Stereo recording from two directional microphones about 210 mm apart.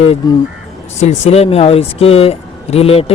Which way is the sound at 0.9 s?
30° left (ahead or behind).